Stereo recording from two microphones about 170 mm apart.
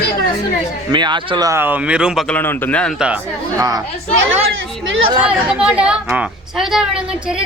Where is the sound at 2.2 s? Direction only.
10° left (ahead or behind).